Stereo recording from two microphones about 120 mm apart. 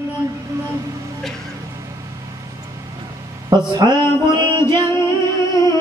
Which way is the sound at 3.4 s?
35° right (ahead or behind).